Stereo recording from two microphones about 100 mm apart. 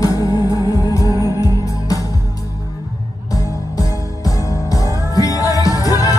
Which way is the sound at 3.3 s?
35° left (ahead or behind).